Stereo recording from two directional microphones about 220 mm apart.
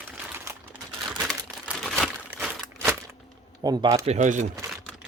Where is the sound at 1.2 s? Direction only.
Centre (ahead or behind).